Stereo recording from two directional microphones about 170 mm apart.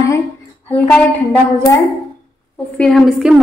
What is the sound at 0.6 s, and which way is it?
Speech, 10° left (ahead or behind).